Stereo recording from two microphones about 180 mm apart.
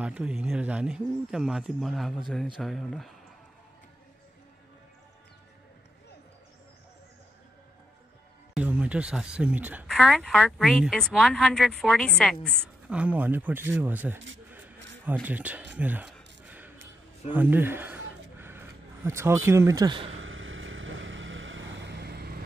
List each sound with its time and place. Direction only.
0.0 s speech: 5° right (ahead or behind)
8.5 s speech: 5° right (ahead or behind)
9.8 s speech: centre (ahead or behind)
12.9 s speech: 5° right (ahead or behind)
15.2 s speech: 10° right (ahead or behind)
15.7 s a sound: 10° right (ahead or behind)
19.0 s speech: 15° right (ahead or behind)
20.2 s vehicle: 90° right; by 22.3 s 65° right (ahead or behind)